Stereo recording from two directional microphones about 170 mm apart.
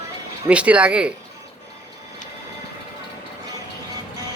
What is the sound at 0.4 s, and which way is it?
Speech, 5° right (ahead or behind).